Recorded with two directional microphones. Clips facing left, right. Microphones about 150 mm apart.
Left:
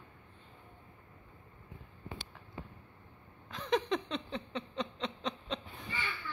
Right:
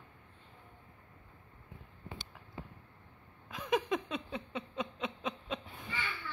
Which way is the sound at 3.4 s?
5° right (ahead or behind).